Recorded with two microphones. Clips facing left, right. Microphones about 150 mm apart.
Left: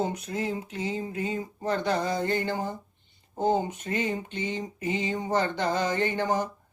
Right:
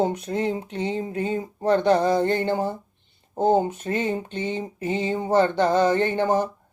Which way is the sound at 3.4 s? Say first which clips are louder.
Right 5 dB; 50° right (ahead or behind).